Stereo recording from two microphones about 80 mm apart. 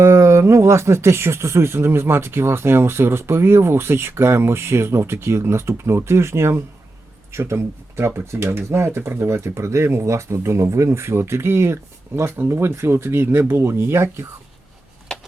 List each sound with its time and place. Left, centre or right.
0.0 s speech: right